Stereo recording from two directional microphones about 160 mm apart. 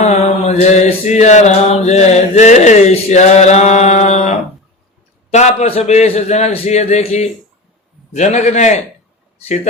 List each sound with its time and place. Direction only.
0.0 s mantra: 45° left (ahead or behind)
5.3 s a man's voice: 45° left (ahead or behind)
5.9 s mantra: 45° left (ahead or behind)